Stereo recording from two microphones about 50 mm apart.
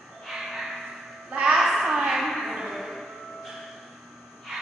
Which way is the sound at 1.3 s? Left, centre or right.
Right.